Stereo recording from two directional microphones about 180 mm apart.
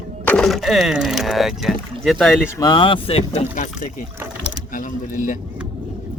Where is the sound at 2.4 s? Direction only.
20° left (ahead or behind); by 3.7 s 40° left (ahead or behind).